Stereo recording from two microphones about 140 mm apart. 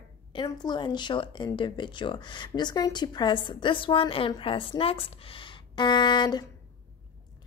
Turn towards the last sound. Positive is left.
turn(degrees=30)  # may be behind; listen again after turning